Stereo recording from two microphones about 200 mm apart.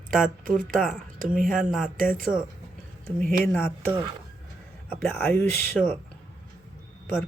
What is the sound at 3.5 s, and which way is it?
Speech, 5° left (ahead or behind).